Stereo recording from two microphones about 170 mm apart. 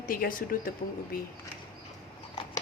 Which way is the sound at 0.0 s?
55° left (ahead or behind).